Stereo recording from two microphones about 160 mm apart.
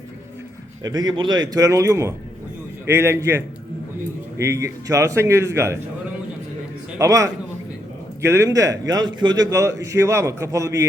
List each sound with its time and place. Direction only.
0.8 s a man's voice: 25° right (ahead or behind)
7.0 s a man's voice: 20° right (ahead or behind)